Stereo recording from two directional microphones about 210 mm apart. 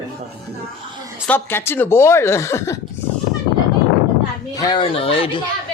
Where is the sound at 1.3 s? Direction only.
10° left (ahead or behind).